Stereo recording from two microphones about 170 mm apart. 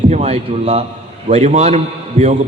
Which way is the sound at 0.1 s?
40° right (ahead or behind).